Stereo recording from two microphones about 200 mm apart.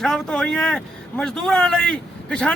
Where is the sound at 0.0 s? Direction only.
5° left (ahead or behind).